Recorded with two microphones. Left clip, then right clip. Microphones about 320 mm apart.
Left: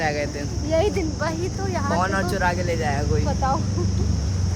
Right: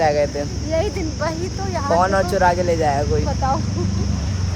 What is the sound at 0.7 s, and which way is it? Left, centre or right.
Speech, centre.